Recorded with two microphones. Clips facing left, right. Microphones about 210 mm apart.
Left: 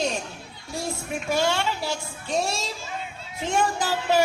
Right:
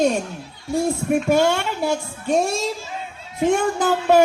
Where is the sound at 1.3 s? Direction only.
50° right (ahead or behind).